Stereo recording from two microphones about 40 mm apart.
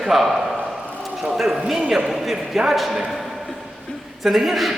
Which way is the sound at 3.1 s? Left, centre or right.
Centre.